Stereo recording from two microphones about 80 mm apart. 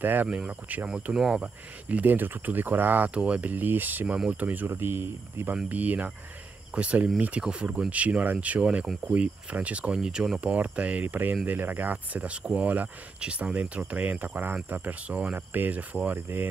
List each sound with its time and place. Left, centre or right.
0.0 s speech: right